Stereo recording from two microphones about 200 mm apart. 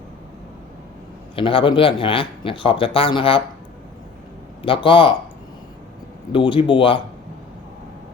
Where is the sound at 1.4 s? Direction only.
25° left (ahead or behind).